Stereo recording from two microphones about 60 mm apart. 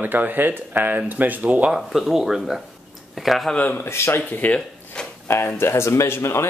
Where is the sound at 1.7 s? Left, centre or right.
Centre.